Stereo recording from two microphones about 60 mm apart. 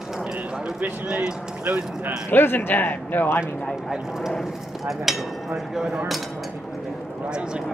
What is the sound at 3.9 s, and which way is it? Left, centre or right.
Speech, centre.